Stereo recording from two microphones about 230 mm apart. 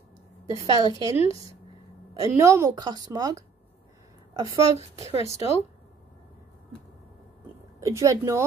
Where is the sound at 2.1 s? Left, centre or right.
Centre.